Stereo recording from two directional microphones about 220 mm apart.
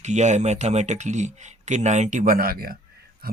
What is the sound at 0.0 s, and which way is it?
Speech, 30° right (ahead or behind).